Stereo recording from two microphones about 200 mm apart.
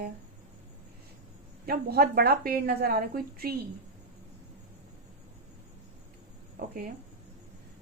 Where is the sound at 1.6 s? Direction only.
50° right (ahead or behind).